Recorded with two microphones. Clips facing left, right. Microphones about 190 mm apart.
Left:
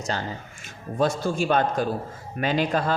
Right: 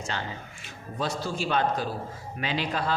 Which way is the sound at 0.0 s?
40° left (ahead or behind).